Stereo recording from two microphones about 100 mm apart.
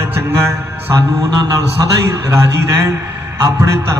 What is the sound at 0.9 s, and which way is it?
A man's voice, 35° right (ahead or behind).